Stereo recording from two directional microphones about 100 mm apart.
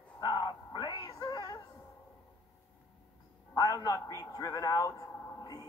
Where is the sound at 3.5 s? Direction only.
40° left (ahead or behind).